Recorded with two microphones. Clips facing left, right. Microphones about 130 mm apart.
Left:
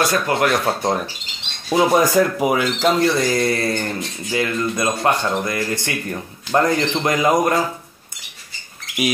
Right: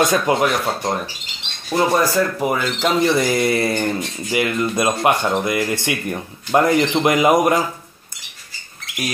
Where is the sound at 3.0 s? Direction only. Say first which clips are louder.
Right 1 dB; 15° right (ahead or behind).